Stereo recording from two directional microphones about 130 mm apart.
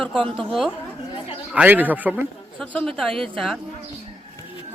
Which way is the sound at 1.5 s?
10° right (ahead or behind).